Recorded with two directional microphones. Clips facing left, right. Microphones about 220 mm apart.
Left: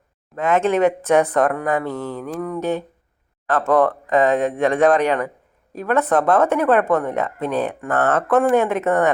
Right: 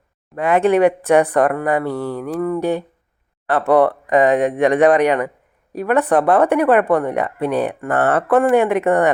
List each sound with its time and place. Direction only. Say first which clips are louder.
0.3 s speech: right 3 dB; 15° right (ahead or behind)